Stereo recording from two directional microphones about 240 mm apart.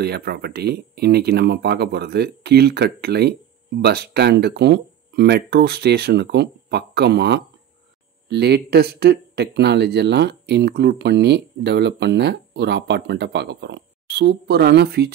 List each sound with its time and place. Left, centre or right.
0.0 s speech: right